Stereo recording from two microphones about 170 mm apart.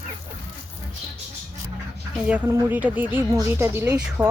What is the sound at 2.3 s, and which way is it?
Speech, 10° right (ahead or behind).